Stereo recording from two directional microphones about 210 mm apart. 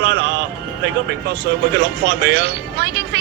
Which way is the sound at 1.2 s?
55° right (ahead or behind).